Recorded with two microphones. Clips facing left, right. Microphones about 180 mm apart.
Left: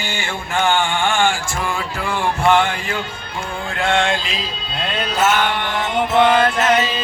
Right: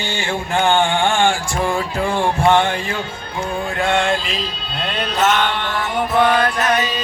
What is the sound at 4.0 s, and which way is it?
Music, 5° right (ahead or behind).